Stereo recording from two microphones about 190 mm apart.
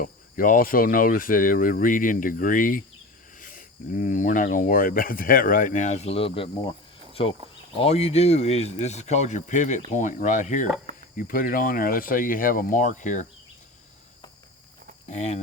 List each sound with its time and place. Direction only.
0.0 s speech: 45° left (ahead or behind)
15.1 s speech: 35° left (ahead or behind)